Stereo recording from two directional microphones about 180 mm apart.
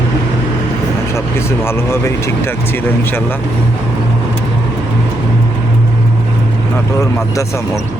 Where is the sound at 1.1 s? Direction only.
15° left (ahead or behind).